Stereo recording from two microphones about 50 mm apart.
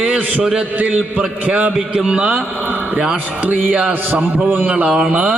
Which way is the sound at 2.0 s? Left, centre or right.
Centre.